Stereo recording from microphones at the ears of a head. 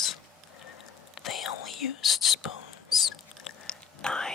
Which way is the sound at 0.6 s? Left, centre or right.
Left.